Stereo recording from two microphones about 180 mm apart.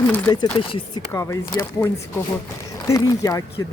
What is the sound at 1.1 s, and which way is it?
Speech, 15° left (ahead or behind).